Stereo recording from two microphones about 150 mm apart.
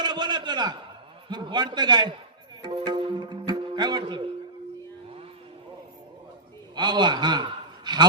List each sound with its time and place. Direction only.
0.0 s a sound: 30° right (ahead or behind)
1.3 s a man's voice: 30° right (ahead or behind)
2.6 s music: 30° right (ahead or behind)
6.7 s a man's voice: 30° right (ahead or behind)